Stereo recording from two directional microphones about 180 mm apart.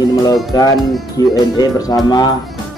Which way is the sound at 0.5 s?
20° left (ahead or behind).